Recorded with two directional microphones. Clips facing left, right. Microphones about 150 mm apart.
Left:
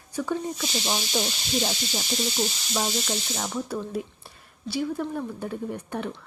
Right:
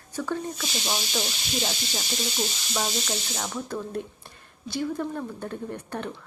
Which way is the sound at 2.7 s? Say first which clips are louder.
Left 1 dB; 5° left (ahead or behind).